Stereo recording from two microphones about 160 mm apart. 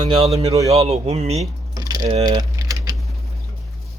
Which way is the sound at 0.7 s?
40° right (ahead or behind).